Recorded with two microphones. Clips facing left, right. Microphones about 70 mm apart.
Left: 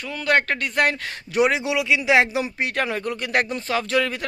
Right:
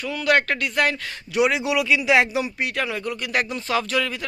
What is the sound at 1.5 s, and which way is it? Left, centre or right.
Speech, left.